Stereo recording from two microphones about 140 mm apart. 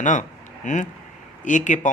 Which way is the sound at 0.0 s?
65° left (ahead or behind).